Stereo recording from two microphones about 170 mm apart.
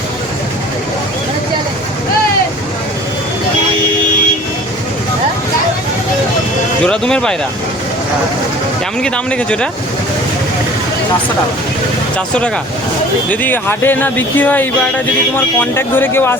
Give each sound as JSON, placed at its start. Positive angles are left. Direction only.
{"t": 6.8, "sound": "a man's voice", "side_deg": 5}
{"t": 9.0, "sound": "a man's voice", "side_deg": 5}
{"t": 13.3, "sound": "speech", "side_deg": 10}
{"t": 15.7, "sound": "speech", "side_deg": 15}